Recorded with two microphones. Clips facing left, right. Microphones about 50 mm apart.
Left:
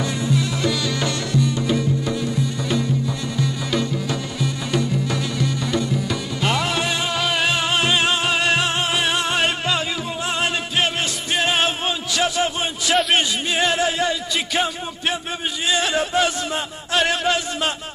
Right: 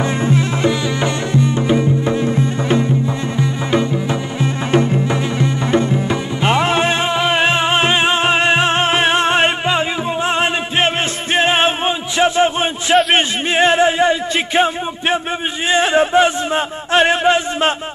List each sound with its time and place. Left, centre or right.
0.0 s music: right
13.1 s a sound: right
15.7 s chant: right